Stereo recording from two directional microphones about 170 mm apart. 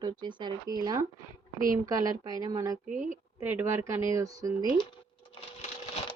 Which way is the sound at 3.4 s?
15° right (ahead or behind).